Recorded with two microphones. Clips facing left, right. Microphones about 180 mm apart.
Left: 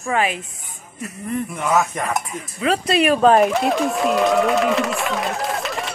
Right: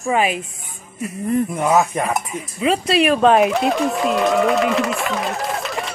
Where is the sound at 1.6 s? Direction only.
15° right (ahead or behind).